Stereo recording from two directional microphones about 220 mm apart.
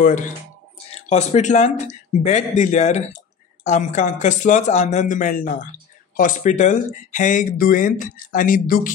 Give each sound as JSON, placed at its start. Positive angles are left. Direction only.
{"t": 0.0, "sound": "speech", "side_deg": 35}